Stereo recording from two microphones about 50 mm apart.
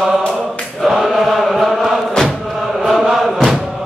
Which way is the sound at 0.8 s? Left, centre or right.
Centre.